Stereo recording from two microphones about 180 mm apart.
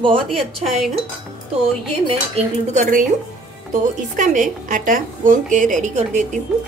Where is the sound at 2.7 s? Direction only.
45° right (ahead or behind).